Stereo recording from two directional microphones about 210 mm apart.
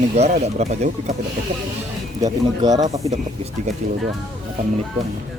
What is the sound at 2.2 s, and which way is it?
Speech, 20° right (ahead or behind).